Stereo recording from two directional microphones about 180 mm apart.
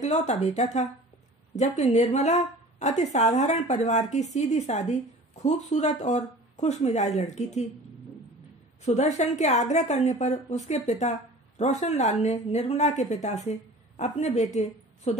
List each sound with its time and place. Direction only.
0.0 s a woman's voice: 40° left (ahead or behind)
8.8 s a woman's voice: 40° left (ahead or behind)